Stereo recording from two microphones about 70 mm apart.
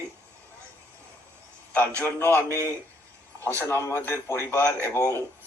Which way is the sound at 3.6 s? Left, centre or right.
Left.